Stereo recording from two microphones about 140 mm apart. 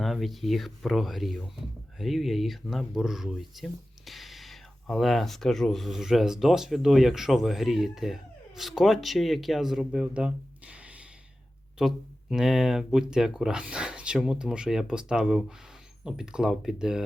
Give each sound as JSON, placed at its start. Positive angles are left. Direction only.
{"t": 0.0, "sound": "speech", "side_deg": 0}